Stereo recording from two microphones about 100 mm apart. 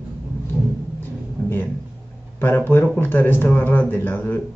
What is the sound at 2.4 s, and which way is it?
A man's voice, 20° left (ahead or behind).